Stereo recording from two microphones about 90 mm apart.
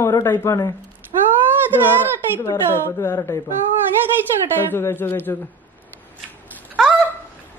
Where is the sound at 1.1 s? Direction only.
70° right (ahead or behind).